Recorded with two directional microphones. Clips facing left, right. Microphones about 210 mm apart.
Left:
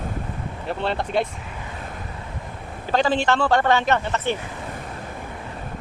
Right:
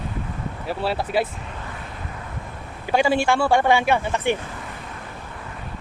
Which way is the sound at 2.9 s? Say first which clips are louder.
Right 1 dB; 10° right (ahead or behind).